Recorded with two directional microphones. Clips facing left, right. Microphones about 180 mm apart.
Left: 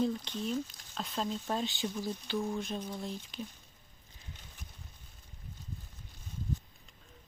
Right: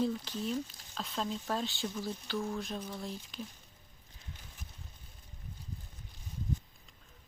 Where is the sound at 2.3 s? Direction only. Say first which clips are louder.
Left 2 dB; 15° left (ahead or behind).